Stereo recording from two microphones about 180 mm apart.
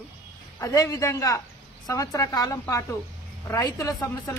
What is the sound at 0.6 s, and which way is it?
A man's voice, 15° left (ahead or behind).